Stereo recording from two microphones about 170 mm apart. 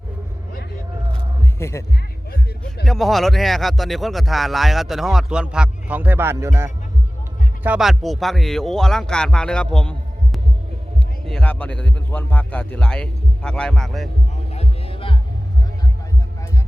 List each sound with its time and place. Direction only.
1.5 s speech: 15° left (ahead or behind)
2.8 s speech: centre (ahead or behind)
11.3 s speech: 5° left (ahead or behind)
14.5 s music: 35° left (ahead or behind)